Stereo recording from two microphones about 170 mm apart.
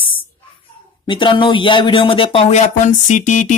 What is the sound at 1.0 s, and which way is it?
Speech, 30° left (ahead or behind).